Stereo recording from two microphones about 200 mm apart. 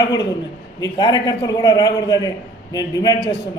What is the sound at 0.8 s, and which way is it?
A woman's voice, 20° left (ahead or behind).